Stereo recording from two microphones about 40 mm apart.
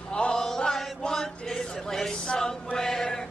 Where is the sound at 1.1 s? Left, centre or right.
Centre.